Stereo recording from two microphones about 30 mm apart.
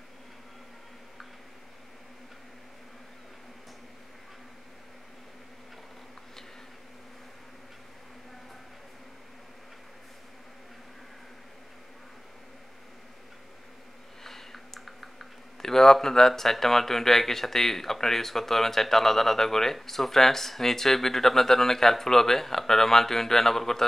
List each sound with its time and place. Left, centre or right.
14.2 s a sound: centre
14.9 s typing: centre
15.5 s speech: centre